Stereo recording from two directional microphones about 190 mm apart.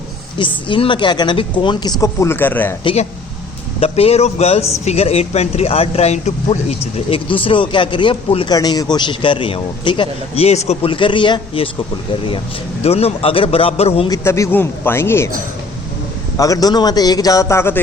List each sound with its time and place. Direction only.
0.3 s speech: 25° left (ahead or behind); by 2.7 s 10° left (ahead or behind)
2.8 s a man's voice: 35° left (ahead or behind)
12.8 s a man's voice: 30° left (ahead or behind)
14.1 s a man's voice: 15° left (ahead or behind)
16.4 s speech: 20° left (ahead or behind)